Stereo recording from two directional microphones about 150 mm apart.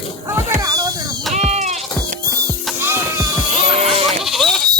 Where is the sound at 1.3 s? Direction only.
45° right (ahead or behind).